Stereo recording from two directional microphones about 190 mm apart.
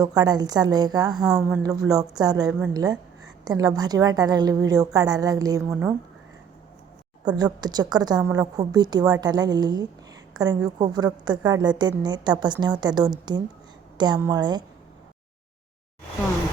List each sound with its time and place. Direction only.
0.0 s a woman's voice: 20° right (ahead or behind)
1.1 s speech: centre (ahead or behind)
1.6 s a woman's voice: 20° right (ahead or behind)
7.3 s a woman's voice: 20° right (ahead or behind)